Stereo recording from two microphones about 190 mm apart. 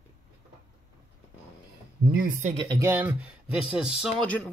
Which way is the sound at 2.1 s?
45° right (ahead or behind).